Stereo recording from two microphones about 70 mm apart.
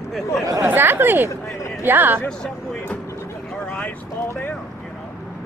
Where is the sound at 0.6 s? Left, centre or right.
Right.